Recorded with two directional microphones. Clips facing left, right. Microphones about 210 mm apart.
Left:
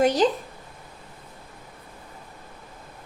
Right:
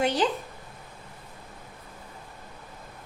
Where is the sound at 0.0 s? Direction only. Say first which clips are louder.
Left 5 dB; 40° left (ahead or behind).